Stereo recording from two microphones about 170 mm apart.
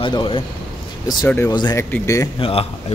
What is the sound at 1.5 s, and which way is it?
Speech, 25° left (ahead or behind).